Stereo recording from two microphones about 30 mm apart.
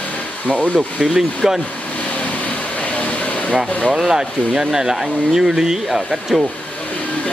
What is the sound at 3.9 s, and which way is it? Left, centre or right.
Speech, centre.